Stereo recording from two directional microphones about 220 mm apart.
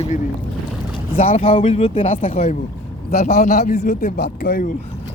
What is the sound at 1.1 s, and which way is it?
Speech, 25° left (ahead or behind).